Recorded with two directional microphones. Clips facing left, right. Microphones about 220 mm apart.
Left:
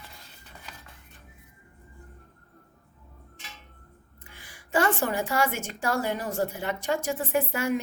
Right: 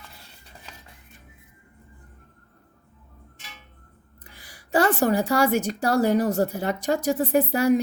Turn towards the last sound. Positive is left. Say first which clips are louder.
# right 7 dB
turn(degrees=-35)  # may be behind; listen again after turning